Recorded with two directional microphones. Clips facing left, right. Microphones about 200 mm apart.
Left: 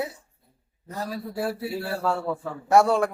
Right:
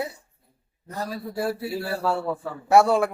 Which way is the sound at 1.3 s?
5° right (ahead or behind).